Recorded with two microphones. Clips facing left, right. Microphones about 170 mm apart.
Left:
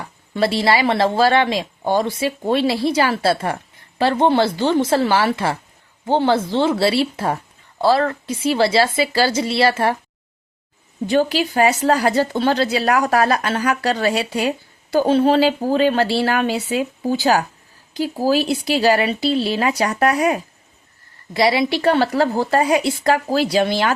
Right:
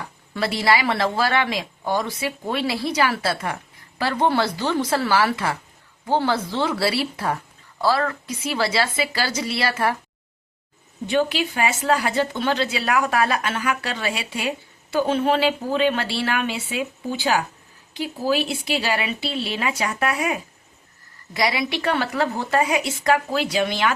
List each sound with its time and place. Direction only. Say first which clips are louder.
0.3 s speech: left 4 dB; 30° left (ahead or behind)
11.0 s a woman's voice: left 4 dB; 35° left (ahead or behind)
21.3 s a woman's voice: left 6 dB; 30° left (ahead or behind)